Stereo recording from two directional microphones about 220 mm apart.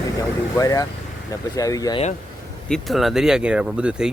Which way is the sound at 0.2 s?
15° left (ahead or behind).